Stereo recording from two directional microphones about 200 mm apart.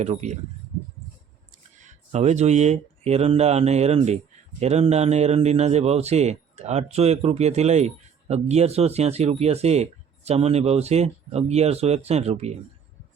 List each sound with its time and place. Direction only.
0.0 s speech: 35° right (ahead or behind)
1.8 s speech: 35° right (ahead or behind)